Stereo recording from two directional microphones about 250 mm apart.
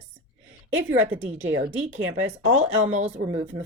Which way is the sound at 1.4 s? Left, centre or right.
Right.